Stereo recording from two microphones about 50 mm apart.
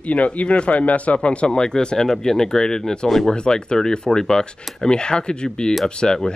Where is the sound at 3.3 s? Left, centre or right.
Centre.